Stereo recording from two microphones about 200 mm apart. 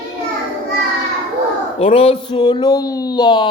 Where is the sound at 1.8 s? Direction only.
30° left (ahead or behind).